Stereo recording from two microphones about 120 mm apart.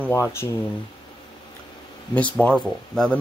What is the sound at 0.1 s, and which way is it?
Speech, 20° left (ahead or behind).